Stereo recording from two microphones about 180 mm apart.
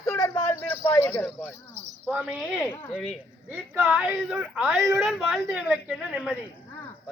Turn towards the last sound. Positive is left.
turn(degrees=-5)  # may be behind; listen again after turning